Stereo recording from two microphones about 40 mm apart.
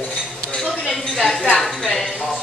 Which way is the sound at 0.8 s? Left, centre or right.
Centre.